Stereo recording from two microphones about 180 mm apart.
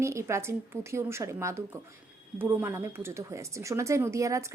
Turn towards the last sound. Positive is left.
turn(degrees=-15)  # may be behind; listen again after turning